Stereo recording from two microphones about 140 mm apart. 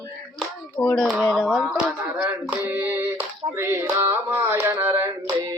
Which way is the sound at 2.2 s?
15° right (ahead or behind).